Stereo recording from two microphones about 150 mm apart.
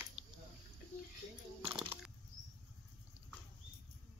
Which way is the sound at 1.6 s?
35° right (ahead or behind).